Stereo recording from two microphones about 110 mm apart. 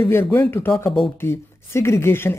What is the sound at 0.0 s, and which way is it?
A woman's voice, 20° left (ahead or behind).